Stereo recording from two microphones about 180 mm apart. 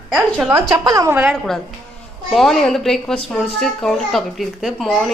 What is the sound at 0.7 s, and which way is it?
Speech, 15° right (ahead or behind).